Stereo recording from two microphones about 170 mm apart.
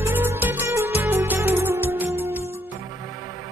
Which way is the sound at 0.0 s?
10° right (ahead or behind).